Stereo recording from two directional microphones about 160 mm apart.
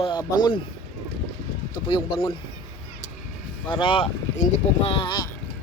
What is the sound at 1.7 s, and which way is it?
Speech, 30° left (ahead or behind).